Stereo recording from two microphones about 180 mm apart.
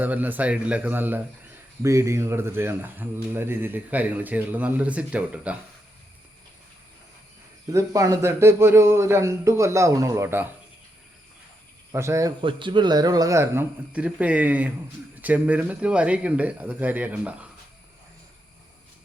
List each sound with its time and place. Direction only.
0.0 s speech: 10° right (ahead or behind)
7.7 s speech: 15° right (ahead or behind)
11.9 s speech: 15° right (ahead or behind)